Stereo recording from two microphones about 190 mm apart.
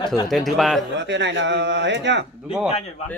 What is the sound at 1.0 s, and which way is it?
Speech, 70° right (ahead or behind).